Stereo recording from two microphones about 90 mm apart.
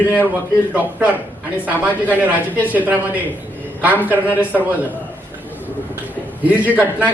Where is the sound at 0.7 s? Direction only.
15° right (ahead or behind).